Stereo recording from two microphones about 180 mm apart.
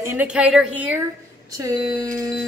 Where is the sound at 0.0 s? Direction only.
10° right (ahead or behind).